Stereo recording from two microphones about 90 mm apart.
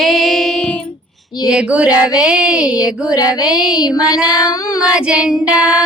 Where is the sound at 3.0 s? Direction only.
45° left (ahead or behind).